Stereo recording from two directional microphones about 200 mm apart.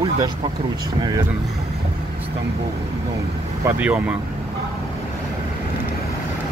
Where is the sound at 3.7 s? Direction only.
5° right (ahead or behind).